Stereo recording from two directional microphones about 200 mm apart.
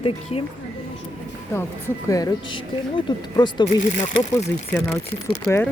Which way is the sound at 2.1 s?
15° left (ahead or behind).